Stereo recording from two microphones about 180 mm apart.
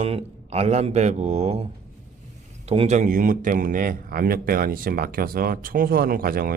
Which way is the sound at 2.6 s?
35° right (ahead or behind).